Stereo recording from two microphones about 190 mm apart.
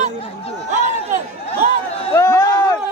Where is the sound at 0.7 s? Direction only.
40° right (ahead or behind).